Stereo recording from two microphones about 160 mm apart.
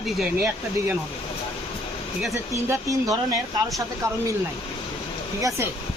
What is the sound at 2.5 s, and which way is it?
Speech, 20° right (ahead or behind).